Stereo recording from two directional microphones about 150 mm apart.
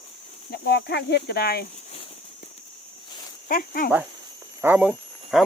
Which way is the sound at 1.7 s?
45° left (ahead or behind).